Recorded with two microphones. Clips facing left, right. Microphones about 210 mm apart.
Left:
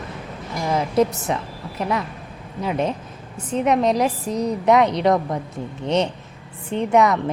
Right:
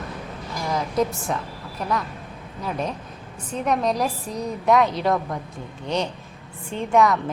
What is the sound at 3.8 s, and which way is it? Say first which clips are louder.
A woman's voice: left 4 dB; 20° left (ahead or behind).